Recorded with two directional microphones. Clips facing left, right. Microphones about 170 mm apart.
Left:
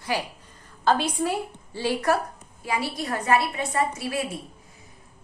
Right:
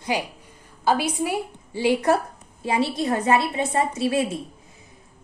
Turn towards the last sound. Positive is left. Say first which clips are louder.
# right 4 dB
turn(degrees=-25)  # may be behind; listen again after turning